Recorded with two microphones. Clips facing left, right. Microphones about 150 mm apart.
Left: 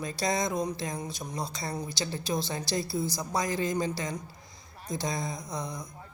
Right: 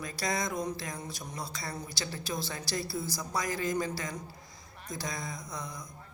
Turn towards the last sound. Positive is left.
turn(degrees=25)  # may be behind; listen again after turning